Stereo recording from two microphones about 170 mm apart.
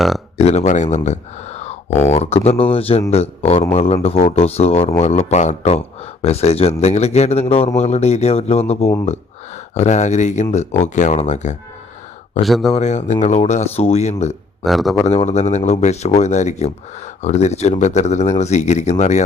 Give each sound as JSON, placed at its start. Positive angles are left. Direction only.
{"t": 0.3, "sound": "speech", "side_deg": 40}
{"t": 12.4, "sound": "speech", "side_deg": 0}
{"t": 12.7, "sound": "speech", "side_deg": 45}
{"t": 14.6, "sound": "speech", "side_deg": 0}
{"t": 15.0, "sound": "speech", "side_deg": 40}